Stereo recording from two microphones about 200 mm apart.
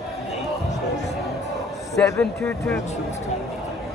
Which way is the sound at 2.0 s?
15° left (ahead or behind).